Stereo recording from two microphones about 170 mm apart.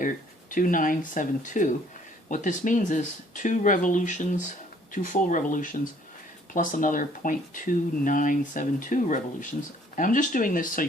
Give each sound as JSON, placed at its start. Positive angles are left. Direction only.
{"t": 0.5, "sound": "speech", "side_deg": 50}